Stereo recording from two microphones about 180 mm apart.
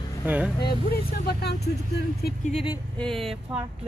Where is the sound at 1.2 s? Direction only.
65° left (ahead or behind).